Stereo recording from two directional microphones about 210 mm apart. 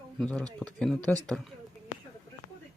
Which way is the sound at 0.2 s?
5° left (ahead or behind).